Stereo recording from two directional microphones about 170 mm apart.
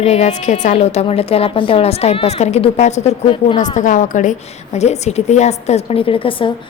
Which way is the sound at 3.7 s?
50° left (ahead or behind).